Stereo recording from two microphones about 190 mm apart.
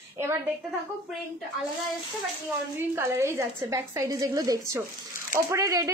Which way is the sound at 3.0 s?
15° right (ahead or behind).